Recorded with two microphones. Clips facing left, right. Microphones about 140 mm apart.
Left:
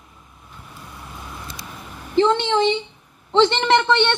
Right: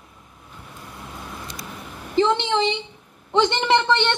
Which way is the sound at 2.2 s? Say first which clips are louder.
Left 2 dB; 15° right (ahead or behind).